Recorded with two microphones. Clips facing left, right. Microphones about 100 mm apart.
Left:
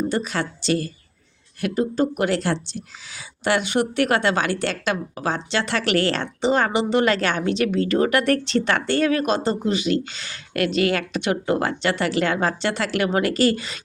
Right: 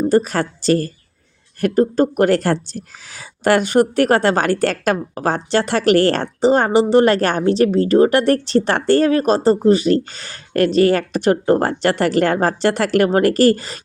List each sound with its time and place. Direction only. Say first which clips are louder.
0.1 s a woman's voice: right 8 dB; 45° right (ahead or behind)